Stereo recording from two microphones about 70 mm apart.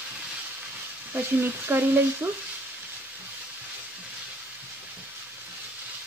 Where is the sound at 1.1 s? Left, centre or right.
Right.